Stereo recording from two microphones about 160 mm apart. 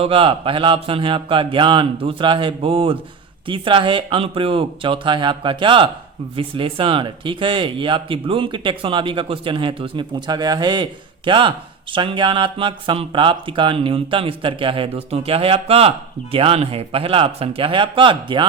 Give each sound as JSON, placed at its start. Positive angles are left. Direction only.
{"t": 0.0, "sound": "speech", "side_deg": -35}